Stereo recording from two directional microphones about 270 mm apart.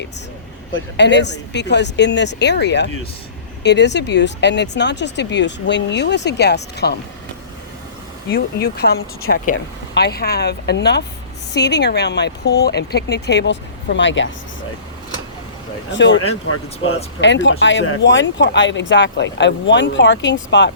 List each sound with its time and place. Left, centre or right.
0.7 s speech: left
8.3 s speech: left
15.9 s speech: left